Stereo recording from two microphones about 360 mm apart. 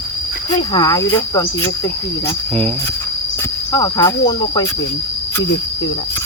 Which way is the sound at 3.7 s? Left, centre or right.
Centre.